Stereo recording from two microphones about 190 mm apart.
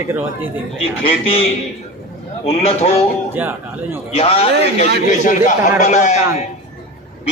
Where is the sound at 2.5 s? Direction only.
30° left (ahead or behind).